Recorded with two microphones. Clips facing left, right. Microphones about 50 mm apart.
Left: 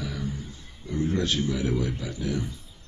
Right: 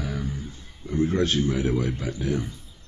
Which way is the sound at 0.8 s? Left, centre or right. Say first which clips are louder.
Right 4 dB; right.